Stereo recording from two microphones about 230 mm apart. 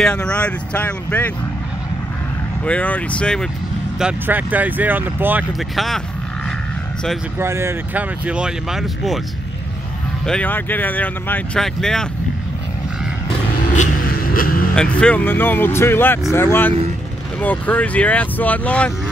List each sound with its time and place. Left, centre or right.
0.0 s speech: centre
2.6 s speech: centre
4.0 s speech: centre
7.3 s speech: centre
10.2 s speech: centre
13.7 s vehicle: left
14.8 s speech: centre